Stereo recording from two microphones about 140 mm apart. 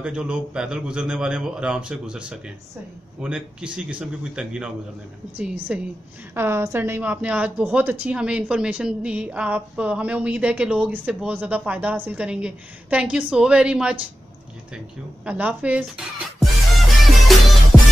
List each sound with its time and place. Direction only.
0.0 s a woman's voice: 5° right (ahead or behind)
15.2 s a woman's voice: 10° right (ahead or behind)
16.3 s music: centre (ahead or behind)